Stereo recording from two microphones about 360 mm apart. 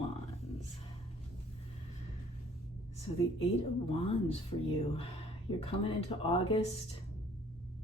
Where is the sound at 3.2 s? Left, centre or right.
Centre.